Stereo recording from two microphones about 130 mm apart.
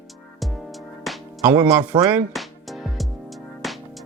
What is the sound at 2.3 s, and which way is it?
Music, centre (ahead or behind).